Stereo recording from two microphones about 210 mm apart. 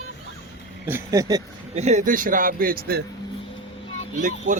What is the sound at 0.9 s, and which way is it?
Speech, 15° right (ahead or behind).